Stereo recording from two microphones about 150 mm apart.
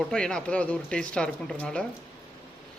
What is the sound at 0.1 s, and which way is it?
Speech, 5° left (ahead or behind).